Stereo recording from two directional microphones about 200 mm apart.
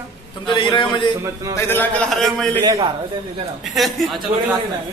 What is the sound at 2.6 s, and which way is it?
Speech, 20° right (ahead or behind).